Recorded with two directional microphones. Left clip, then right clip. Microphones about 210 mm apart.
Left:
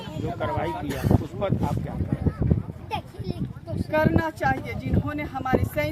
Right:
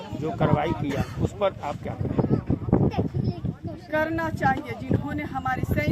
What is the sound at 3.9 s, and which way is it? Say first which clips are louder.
Speech: left 2 dB; 5° left (ahead or behind).